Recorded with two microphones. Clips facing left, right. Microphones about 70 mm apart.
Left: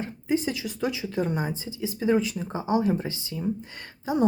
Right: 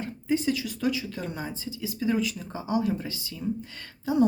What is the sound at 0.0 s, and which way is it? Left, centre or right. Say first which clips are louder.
Speech: even; left.